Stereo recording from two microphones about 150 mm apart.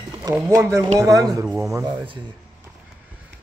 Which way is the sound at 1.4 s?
5° right (ahead or behind).